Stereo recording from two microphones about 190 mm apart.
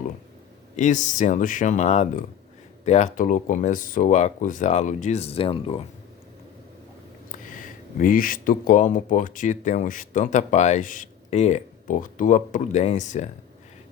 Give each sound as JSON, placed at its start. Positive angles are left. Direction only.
{"t": 0.8, "sound": "speech", "side_deg": 40}
{"t": 7.3, "sound": "speech", "side_deg": 45}